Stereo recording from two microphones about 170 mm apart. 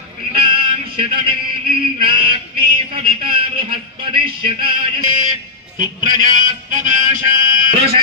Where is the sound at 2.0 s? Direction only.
30° right (ahead or behind).